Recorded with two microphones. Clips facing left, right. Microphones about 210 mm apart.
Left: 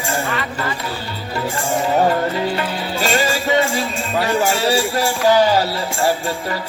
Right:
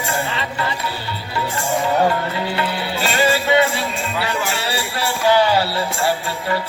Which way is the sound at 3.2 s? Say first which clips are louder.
Right 5 dB; 40° left (ahead or behind).